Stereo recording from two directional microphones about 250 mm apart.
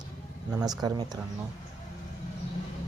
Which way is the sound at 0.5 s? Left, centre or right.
Centre.